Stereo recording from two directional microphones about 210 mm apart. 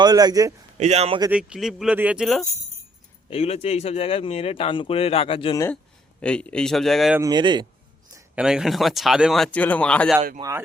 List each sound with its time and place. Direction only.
0.0 s speech: 20° right (ahead or behind)
0.8 s speech: 30° right (ahead or behind)
1.3 s speech: 5° right (ahead or behind)
3.2 s speech: 30° left (ahead or behind)
5.5 s speech: 10° left (ahead or behind)
7.2 s speech: 20° right (ahead or behind)
8.1 s speech: 5° right (ahead or behind)